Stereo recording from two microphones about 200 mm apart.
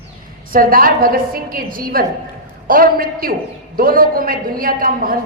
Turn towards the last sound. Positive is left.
turn(degrees=-45)  # may be behind; listen again after turning